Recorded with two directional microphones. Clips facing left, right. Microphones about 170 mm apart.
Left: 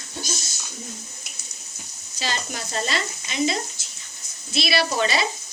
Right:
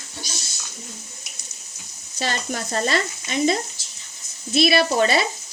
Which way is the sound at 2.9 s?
45° right (ahead or behind).